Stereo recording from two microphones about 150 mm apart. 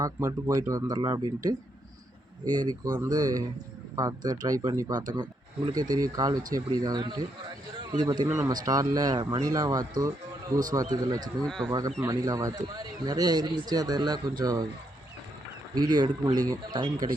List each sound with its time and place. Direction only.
0.0 s speech: 25° right (ahead or behind)
7.8 s a sound: 30° right (ahead or behind)
8.1 s speech: 25° right (ahead or behind)
11.4 s speech: 5° left (ahead or behind)
11.9 s speech: 25° right (ahead or behind)
15.7 s speech: 25° right (ahead or behind)